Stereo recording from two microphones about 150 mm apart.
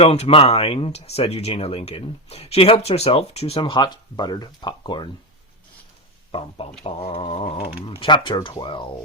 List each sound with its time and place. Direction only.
0.0 s speech: 45° left (ahead or behind)
6.3 s speech: 40° left (ahead or behind)